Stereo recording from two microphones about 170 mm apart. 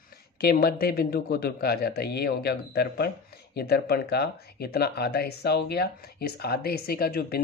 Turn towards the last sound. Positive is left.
turn(degrees=65)  # may be behind; listen again after turning